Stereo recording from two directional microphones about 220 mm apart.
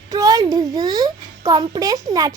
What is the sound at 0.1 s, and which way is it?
A child's voice, 15° right (ahead or behind).